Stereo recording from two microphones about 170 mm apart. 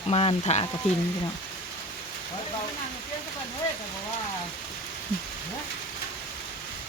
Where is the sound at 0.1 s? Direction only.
35° left (ahead or behind).